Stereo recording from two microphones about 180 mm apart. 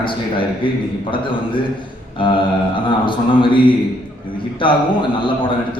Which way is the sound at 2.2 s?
25° left (ahead or behind).